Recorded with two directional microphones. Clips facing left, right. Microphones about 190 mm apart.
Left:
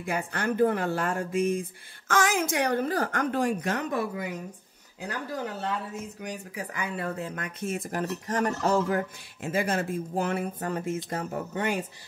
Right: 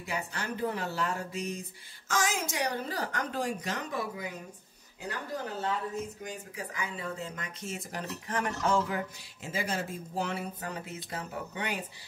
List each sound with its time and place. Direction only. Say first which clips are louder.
0.0 s speech: left 6 dB; 50° left (ahead or behind)
6.2 s speech: left 4 dB; 65° left (ahead or behind); by 11.8 s 45° left (ahead or behind)